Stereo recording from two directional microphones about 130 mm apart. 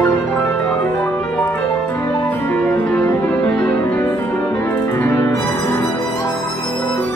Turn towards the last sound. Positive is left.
turn(degrees=15)  # may be behind; listen again after turning